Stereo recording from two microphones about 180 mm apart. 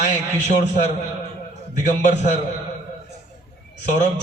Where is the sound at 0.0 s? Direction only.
40° left (ahead or behind).